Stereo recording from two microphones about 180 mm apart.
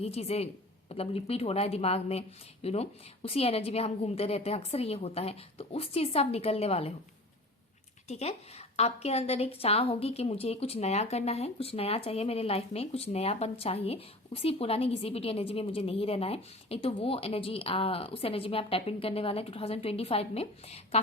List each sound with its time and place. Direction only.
0.0 s a woman's voice: 35° left (ahead or behind)
8.0 s a woman's voice: 35° left (ahead or behind)